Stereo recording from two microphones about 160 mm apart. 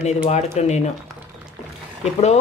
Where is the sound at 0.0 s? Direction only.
45° left (ahead or behind).